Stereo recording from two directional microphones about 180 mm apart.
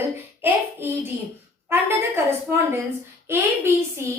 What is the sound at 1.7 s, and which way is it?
A woman's voice, 15° right (ahead or behind).